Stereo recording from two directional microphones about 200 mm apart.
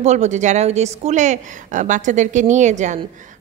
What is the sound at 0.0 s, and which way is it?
Speech, 35° right (ahead or behind).